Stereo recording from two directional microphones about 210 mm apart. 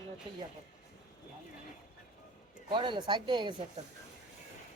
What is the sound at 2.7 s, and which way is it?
Speech, 25° right (ahead or behind).